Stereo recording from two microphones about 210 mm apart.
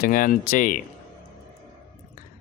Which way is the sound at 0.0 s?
40° left (ahead or behind).